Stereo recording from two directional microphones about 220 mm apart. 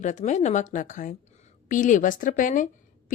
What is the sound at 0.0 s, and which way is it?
A woman's voice, 35° left (ahead or behind).